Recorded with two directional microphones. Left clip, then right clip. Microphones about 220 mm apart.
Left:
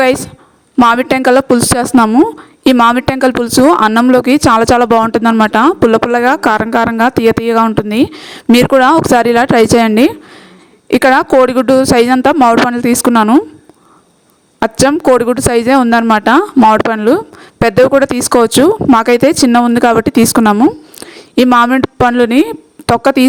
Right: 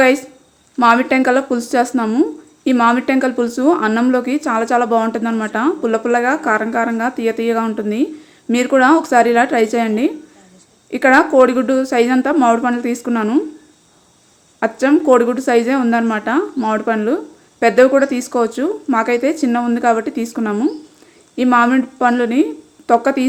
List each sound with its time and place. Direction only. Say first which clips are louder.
0.8 s speech: left 3 dB; 45° left (ahead or behind)
14.6 s speech: left 4 dB; 50° left (ahead or behind)